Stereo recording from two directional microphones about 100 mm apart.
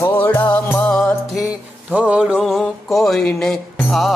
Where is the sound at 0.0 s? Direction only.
20° left (ahead or behind).